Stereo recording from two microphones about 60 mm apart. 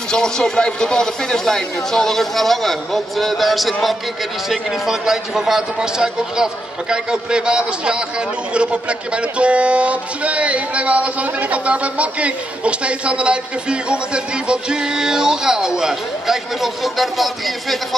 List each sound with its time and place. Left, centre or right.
0.1 s a man's voice: centre